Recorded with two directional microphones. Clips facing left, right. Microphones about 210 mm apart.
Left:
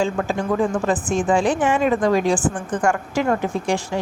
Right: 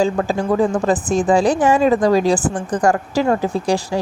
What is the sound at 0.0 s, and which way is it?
A woman's voice, 35° right (ahead or behind).